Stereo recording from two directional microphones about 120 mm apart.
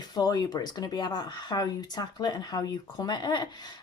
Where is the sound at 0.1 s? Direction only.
35° left (ahead or behind).